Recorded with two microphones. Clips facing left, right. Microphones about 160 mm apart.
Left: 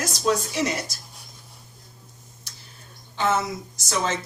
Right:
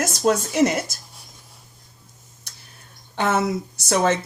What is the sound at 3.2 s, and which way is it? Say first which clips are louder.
Speech: right 3 dB; 60° right (ahead or behind).